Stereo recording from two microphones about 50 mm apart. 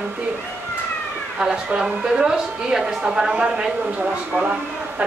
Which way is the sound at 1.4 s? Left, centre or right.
Centre.